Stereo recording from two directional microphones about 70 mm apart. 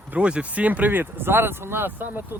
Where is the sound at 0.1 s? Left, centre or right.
Centre.